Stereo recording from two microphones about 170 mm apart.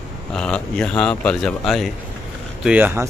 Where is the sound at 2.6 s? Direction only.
10° right (ahead or behind).